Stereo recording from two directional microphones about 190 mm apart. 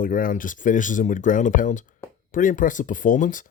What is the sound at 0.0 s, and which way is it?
Speech, 45° left (ahead or behind).